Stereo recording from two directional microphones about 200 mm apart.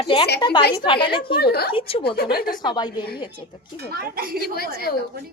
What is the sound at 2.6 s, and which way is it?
Speech, 20° left (ahead or behind).